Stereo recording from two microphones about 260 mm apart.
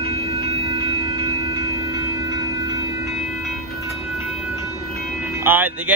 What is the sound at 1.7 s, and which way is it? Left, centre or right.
Train, centre.